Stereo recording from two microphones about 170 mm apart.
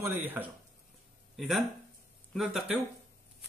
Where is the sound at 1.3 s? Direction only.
Centre (ahead or behind).